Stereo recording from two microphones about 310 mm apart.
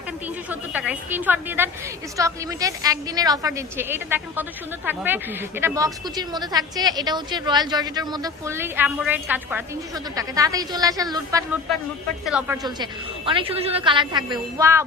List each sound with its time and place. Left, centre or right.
0.5 s a woman's voice: centre